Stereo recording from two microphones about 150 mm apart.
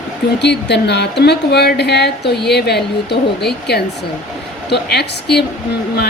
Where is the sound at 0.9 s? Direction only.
90° left.